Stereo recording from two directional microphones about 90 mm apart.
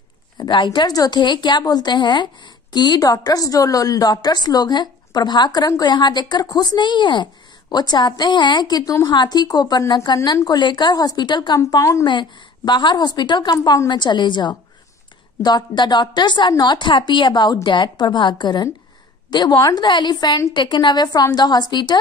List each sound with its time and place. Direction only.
0.4 s a woman's voice: 55° left (ahead or behind)
11.6 s a woman's voice: 35° left (ahead or behind)
12.1 s a woman's voice: 60° left (ahead or behind)
20.5 s a woman's voice: 60° left (ahead or behind)